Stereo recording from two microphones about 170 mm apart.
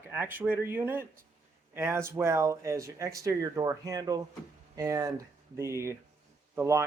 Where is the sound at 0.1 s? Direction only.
10° right (ahead or behind).